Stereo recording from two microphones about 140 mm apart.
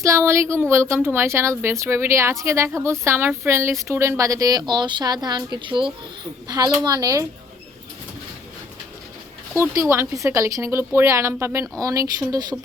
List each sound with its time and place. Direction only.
0.0 s a woman's voice: 20° right (ahead or behind)
9.9 s a woman's voice: 20° right (ahead or behind)